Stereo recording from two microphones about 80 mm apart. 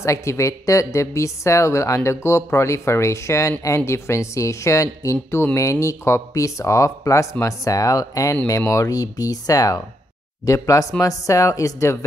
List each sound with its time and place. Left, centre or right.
0.0 s speech: left